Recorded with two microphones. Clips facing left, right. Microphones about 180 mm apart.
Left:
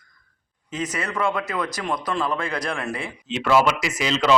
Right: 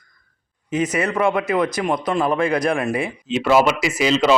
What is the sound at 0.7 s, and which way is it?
Speech, 20° right (ahead or behind).